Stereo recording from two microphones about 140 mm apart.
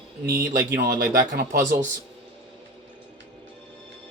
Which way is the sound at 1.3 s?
85° right.